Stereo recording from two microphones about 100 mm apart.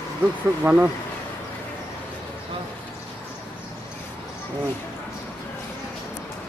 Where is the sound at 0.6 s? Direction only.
15° right (ahead or behind).